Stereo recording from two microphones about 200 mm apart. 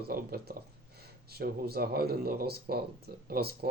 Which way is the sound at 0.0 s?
50° right (ahead or behind).